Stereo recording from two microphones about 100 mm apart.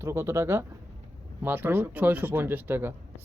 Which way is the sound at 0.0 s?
25° right (ahead or behind).